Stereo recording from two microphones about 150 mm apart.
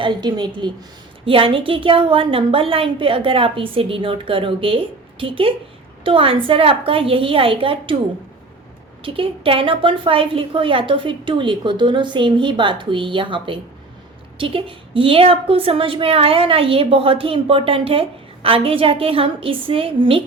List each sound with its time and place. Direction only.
0.0 s a woman's voice: 30° right (ahead or behind)
9.0 s a woman's voice: 35° right (ahead or behind)